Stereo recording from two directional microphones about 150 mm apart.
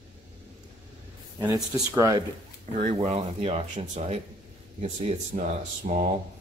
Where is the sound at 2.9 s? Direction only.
45° right (ahead or behind).